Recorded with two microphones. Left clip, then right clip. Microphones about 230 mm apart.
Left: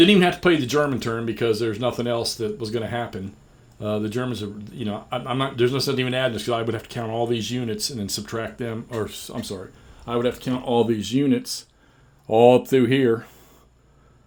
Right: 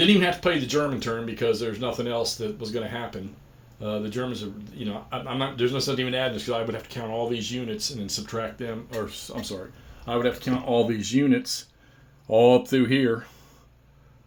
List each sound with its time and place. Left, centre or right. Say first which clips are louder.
0.2 s speech: left 4 dB; left
10.1 s speech: left 1 dB; left